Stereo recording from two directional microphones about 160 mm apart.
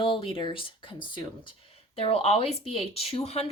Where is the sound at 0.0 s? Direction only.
30° left (ahead or behind).